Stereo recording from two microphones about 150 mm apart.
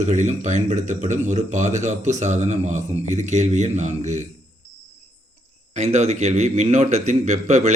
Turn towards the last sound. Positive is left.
turn(degrees=-50)  # may be behind; listen again after turning